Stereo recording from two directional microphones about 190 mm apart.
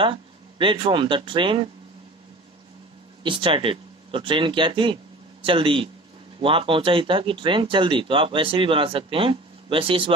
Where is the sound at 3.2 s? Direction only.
25° right (ahead or behind).